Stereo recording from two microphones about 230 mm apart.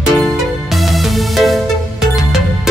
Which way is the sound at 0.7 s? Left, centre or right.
Centre.